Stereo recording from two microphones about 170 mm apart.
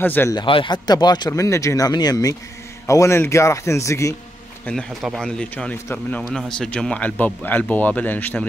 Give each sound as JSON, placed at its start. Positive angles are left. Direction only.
{"t": 0.0, "sound": "speech", "side_deg": 10}
{"t": 0.4, "sound": "a man's voice", "side_deg": 30}
{"t": 4.6, "sound": "speech", "side_deg": 0}